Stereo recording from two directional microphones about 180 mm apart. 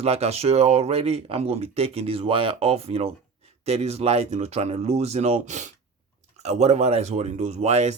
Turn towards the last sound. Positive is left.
turn(degrees=-35)  # may be behind; listen again after turning